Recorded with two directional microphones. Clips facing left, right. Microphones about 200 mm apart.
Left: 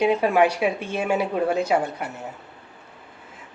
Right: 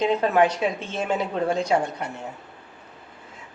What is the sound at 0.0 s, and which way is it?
Speech, 10° left (ahead or behind).